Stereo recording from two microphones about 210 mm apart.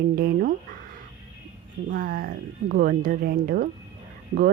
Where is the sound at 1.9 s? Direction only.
45° right (ahead or behind).